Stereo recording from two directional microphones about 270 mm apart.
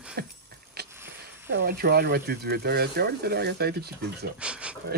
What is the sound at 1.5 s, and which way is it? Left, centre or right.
Speech, right.